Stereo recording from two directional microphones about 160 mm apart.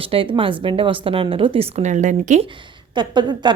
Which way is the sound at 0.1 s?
35° right (ahead or behind).